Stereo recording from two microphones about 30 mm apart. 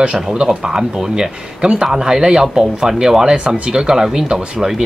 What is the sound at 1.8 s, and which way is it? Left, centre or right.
Speech, centre.